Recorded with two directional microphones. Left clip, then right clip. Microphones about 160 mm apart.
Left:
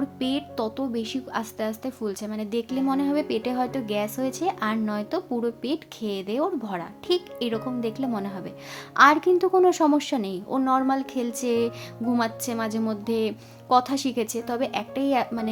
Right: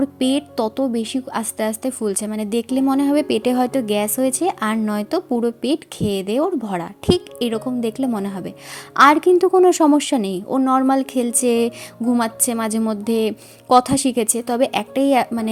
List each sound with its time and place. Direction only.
0.2 s a woman's voice: 35° right (ahead or behind)